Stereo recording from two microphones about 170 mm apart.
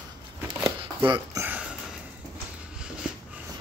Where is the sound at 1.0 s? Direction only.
20° right (ahead or behind).